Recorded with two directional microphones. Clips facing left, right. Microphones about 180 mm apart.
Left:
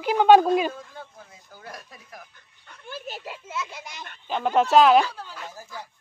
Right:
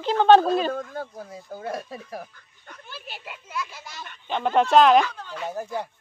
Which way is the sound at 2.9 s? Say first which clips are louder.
Left 5 dB; 45° left (ahead or behind).